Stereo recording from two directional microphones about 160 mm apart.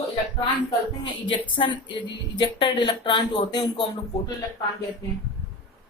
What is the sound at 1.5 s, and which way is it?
A woman's voice, 30° left (ahead or behind).